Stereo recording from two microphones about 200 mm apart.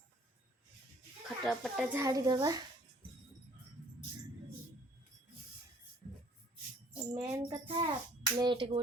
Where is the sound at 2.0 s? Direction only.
20° right (ahead or behind).